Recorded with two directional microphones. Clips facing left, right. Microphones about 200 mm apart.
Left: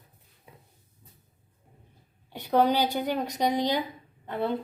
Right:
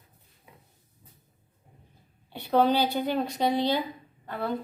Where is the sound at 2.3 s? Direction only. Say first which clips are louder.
Even; 10° left (ahead or behind).